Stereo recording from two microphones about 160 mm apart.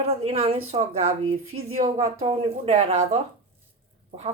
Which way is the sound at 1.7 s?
40° right (ahead or behind).